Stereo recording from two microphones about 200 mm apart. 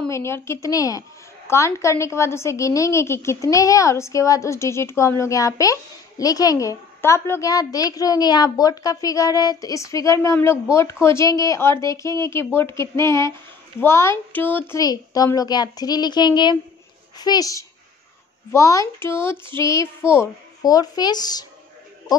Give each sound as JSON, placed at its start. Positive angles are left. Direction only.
{"t": 0.1, "sound": "a child's voice", "side_deg": 15}